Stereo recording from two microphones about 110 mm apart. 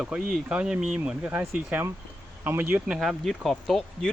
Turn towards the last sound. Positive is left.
turn(degrees=0)  # may be behind; listen again after turning